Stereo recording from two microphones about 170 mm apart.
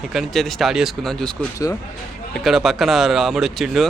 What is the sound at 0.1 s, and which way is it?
Speech, centre (ahead or behind).